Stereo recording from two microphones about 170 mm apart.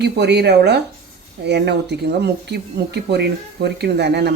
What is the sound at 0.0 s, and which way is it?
A woman's voice, 80° right.